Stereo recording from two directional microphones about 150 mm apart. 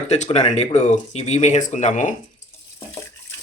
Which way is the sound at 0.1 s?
50° left (ahead or behind).